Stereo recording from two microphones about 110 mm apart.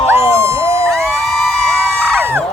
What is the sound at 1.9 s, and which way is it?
Crowd, centre (ahead or behind).